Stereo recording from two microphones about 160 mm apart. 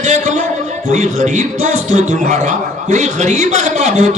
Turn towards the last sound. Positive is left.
turn(degrees=-45)  # may be behind; listen again after turning